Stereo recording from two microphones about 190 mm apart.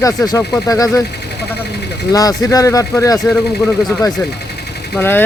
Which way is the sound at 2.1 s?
20° left (ahead or behind).